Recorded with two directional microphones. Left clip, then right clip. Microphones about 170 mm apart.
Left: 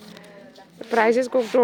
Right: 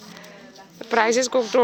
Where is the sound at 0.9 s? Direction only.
20° left (ahead or behind).